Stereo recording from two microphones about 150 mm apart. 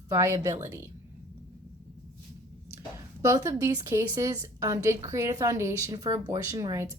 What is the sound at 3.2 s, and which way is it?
A woman's voice, 20° right (ahead or behind).